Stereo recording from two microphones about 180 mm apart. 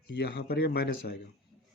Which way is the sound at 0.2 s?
60° left (ahead or behind).